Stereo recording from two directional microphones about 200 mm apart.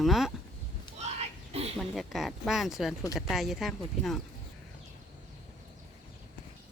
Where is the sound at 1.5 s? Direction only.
30° right (ahead or behind).